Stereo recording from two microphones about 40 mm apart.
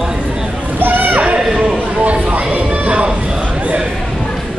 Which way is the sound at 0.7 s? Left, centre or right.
Right.